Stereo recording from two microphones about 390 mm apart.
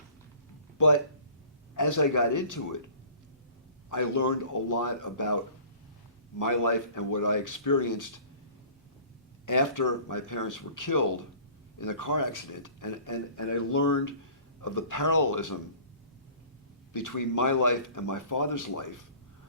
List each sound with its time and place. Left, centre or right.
0.8 s a man's voice: left
3.8 s a man's voice: left
6.4 s a man's voice: left
9.5 s a man's voice: left
16.9 s a man's voice: left